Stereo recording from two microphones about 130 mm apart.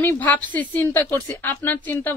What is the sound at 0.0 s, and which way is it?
A woman's voice, 10° left (ahead or behind).